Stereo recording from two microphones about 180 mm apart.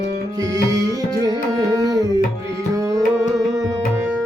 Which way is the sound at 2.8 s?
20° right (ahead or behind).